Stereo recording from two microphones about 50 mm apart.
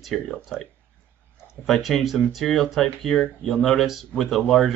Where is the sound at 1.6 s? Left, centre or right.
Centre.